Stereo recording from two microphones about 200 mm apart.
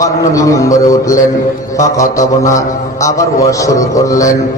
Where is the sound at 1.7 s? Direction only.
15° left (ahead or behind).